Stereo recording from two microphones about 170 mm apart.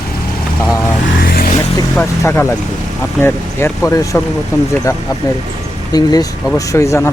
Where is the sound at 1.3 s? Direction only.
60° left (ahead or behind).